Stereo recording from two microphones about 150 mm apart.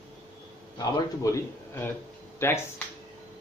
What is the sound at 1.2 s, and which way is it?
A man's voice, 20° left (ahead or behind).